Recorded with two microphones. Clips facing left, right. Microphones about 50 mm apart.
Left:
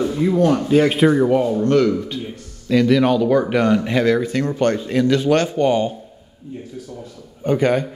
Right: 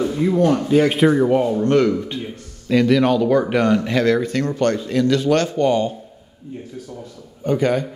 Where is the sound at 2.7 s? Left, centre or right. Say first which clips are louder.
Even; centre.